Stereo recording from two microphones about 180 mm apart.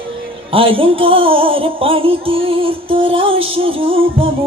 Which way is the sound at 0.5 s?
30° right (ahead or behind).